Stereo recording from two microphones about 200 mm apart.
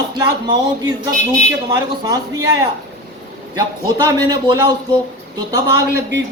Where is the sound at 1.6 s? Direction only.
20° right (ahead or behind).